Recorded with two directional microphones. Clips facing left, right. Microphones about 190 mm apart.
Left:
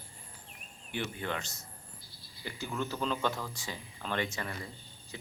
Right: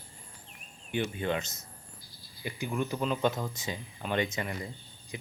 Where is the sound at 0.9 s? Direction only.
20° right (ahead or behind).